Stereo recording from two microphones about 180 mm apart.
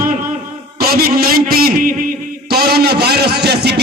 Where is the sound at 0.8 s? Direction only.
55° right (ahead or behind).